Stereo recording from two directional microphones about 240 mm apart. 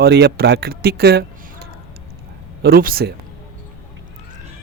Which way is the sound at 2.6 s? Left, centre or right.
Right.